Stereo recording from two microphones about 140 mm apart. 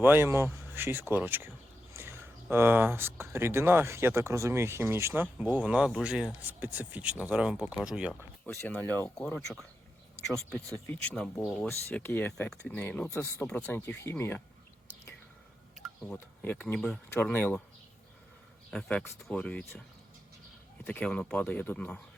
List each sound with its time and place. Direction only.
0.0 s speech: 15° right (ahead or behind)
8.1 s speech: 10° left (ahead or behind)
10.8 s speech: 10° left (ahead or behind)
11.9 s speech: 15° left (ahead or behind)
16.1 s speech: 10° left (ahead or behind)
18.7 s speech: 5° left (ahead or behind)
20.8 s speech: 10° left (ahead or behind)